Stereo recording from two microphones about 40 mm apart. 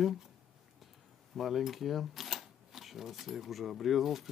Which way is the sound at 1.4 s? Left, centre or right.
Centre.